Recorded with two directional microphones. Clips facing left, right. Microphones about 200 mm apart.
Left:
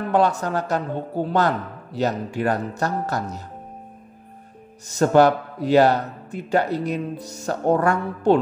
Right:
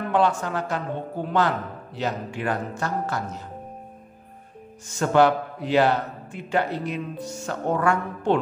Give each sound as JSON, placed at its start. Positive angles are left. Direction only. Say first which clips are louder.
{"t": 0.1, "sound": "a man's voice", "louder": "left 3 dB", "side_deg": 40}
{"t": 4.8, "sound": "a man's voice", "louder": "left 3 dB", "side_deg": 40}